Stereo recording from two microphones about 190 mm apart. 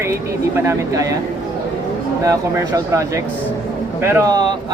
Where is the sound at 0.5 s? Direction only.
15° right (ahead or behind).